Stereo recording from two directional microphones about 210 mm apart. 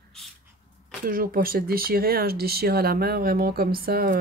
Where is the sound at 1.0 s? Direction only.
45° right (ahead or behind).